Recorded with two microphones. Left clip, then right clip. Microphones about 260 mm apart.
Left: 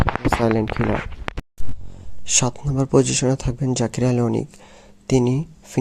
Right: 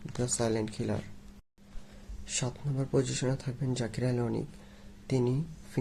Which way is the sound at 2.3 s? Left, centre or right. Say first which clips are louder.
Left 15 dB; left.